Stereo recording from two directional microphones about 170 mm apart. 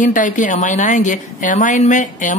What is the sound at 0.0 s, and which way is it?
Speech, 50° left (ahead or behind).